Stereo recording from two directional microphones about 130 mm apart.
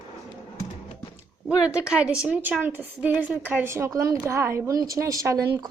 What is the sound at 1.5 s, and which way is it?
A woman's voice, 10° right (ahead or behind).